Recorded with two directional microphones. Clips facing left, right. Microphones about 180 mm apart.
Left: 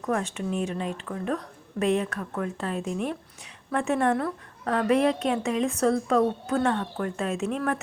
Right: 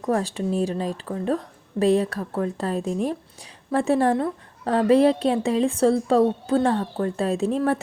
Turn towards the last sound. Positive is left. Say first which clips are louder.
# right 5 dB
turn(degrees=-30)  # may be behind; listen again after turning